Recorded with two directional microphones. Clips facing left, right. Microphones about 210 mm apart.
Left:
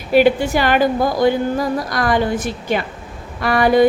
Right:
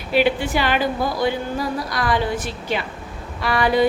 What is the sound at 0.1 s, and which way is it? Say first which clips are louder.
A woman's voice: left 6 dB; 45° left (ahead or behind).